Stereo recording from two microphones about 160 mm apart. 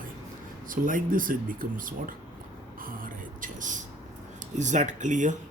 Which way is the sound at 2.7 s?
60° right (ahead or behind).